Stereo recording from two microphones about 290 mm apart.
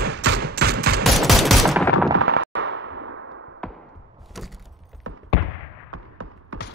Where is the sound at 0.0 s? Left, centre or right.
Right.